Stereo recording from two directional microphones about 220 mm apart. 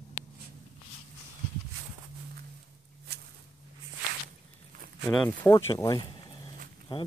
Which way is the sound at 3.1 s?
50° right (ahead or behind).